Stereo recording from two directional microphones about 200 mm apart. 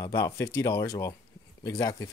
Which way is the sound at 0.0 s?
15° left (ahead or behind).